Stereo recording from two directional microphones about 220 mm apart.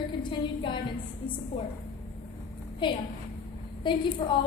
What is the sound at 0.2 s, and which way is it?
Speech, 20° left (ahead or behind).